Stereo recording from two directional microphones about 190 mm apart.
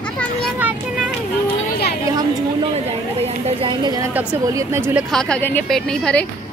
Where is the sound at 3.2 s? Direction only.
30° right (ahead or behind); by 5.0 s 10° right (ahead or behind).